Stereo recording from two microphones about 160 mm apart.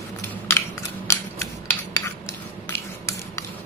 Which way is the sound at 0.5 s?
15° left (ahead or behind).